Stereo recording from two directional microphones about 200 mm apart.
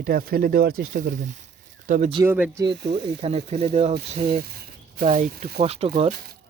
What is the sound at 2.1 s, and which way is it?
Speech, 15° right (ahead or behind).